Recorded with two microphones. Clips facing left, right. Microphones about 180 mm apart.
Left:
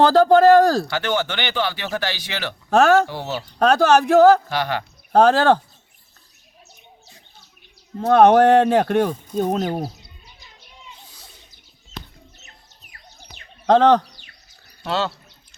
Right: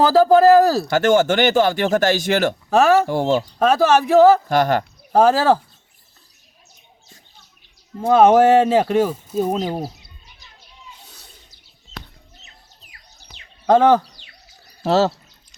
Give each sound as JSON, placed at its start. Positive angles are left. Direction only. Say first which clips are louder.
{"t": 0.0, "sound": "speech", "louder": "even", "side_deg": -5}
{"t": 0.9, "sound": "speech", "louder": "right 8 dB", "side_deg": -45}
{"t": 2.6, "sound": "speech", "louder": "left 1 dB", "side_deg": 0}
{"t": 3.1, "sound": "speech", "louder": "right 10 dB", "side_deg": -45}
{"t": 3.6, "sound": "speech", "louder": "left 2 dB", "side_deg": 0}
{"t": 4.4, "sound": "speech", "louder": "right 7 dB", "side_deg": -45}
{"t": 5.1, "sound": "speech", "louder": "even", "side_deg": -5}
{"t": 7.9, "sound": "speech", "louder": "even", "side_deg": -5}
{"t": 13.7, "sound": "speech", "louder": "right 1 dB", "side_deg": -5}
{"t": 14.8, "sound": "speech", "louder": "right 7 dB", "side_deg": -40}